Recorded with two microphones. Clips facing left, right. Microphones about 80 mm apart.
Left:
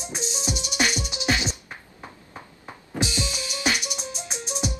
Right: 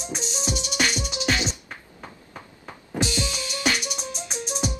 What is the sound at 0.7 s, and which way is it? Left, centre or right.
Music, centre.